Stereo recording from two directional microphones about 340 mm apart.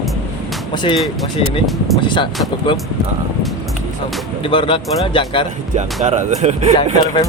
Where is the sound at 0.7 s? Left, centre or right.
Centre.